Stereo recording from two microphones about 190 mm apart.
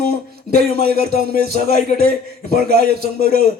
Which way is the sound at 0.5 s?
55° right (ahead or behind).